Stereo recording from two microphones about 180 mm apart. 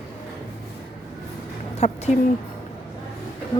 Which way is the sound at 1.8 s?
35° left (ahead or behind).